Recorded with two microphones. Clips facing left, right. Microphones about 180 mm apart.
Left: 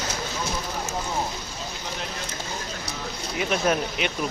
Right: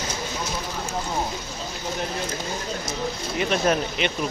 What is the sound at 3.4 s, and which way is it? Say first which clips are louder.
Speech: right 1 dB; 5° left (ahead or behind).